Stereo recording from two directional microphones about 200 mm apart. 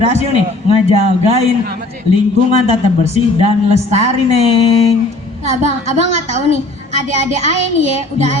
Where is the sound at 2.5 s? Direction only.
35° right (ahead or behind).